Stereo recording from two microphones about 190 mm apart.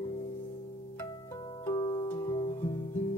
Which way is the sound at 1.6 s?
20° left (ahead or behind).